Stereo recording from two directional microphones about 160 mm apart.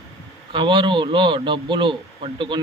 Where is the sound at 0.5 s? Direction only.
30° right (ahead or behind).